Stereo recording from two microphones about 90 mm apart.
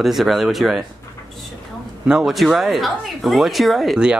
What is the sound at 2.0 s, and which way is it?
Speech, 5° right (ahead or behind).